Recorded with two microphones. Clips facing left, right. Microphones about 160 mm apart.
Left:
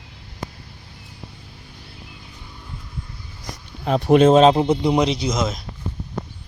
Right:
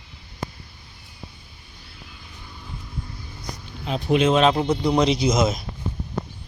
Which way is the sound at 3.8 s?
55° left (ahead or behind).